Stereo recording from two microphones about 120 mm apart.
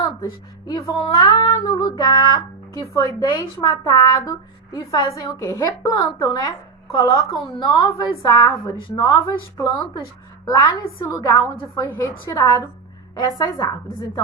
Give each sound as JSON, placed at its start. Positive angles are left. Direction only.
{"t": 0.7, "sound": "a woman's voice", "side_deg": 40}
{"t": 6.9, "sound": "a woman's voice", "side_deg": 45}
{"t": 7.6, "sound": "a woman's voice", "side_deg": 30}